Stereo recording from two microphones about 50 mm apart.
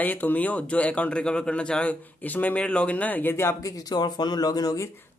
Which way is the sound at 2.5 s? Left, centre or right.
Left.